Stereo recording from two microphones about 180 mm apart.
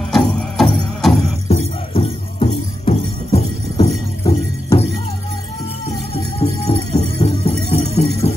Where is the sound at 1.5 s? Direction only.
35° left (ahead or behind).